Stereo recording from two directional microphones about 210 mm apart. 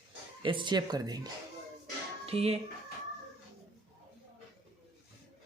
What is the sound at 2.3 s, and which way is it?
Speech, 30° right (ahead or behind).